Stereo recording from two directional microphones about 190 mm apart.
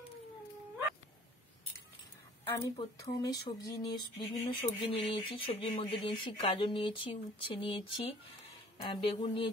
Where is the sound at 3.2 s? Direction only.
20° left (ahead or behind).